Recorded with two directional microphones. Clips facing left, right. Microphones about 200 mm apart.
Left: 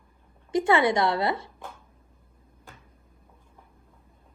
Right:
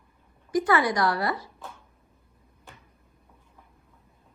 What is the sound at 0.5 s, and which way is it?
A woman's voice, 25° left (ahead or behind).